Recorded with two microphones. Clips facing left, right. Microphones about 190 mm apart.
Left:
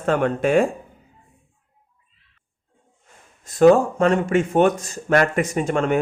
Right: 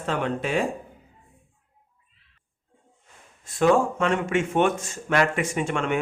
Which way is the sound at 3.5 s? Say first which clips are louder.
Left 6 dB; 40° left (ahead or behind).